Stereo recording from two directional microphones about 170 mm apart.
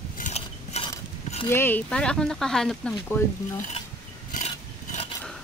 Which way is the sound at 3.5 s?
45° left (ahead or behind).